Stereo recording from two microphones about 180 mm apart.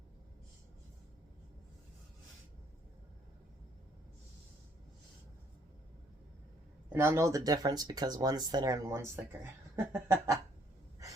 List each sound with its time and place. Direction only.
6.9 s speech: 15° right (ahead or behind)